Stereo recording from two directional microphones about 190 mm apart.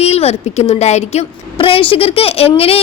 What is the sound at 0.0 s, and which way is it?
A woman's voice, 35° left (ahead or behind).